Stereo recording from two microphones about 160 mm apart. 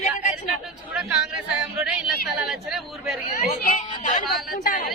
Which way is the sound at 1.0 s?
5° right (ahead or behind).